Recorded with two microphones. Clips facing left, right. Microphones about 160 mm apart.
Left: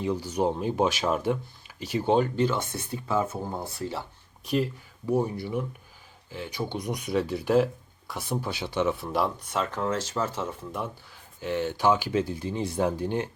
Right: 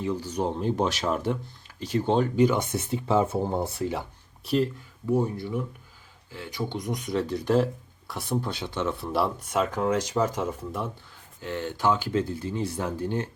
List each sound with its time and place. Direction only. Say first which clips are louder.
0.0 s speech: left 2 dB; 10° left (ahead or behind)
2.3 s speech: right 4 dB; 15° right (ahead or behind)
4.4 s speech: right 2 dB; 5° left (ahead or behind)
5.0 s speech: right 1 dB; 15° left (ahead or behind); by 10.8 s 5° right (ahead or behind)
11.3 s speech: left 3 dB; 20° left (ahead or behind)